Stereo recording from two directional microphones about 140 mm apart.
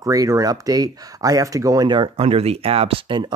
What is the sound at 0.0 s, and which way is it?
Speech, 25° right (ahead or behind).